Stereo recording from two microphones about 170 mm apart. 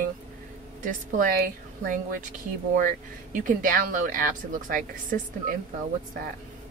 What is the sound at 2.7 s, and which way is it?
A woman's voice, 55° right (ahead or behind).